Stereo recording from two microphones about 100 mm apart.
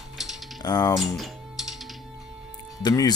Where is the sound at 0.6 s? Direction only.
45° left (ahead or behind).